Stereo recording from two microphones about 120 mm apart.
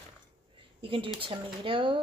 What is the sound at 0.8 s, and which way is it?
Speech, 45° right (ahead or behind).